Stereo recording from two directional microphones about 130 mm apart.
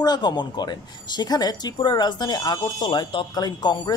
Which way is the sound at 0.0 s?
30° left (ahead or behind).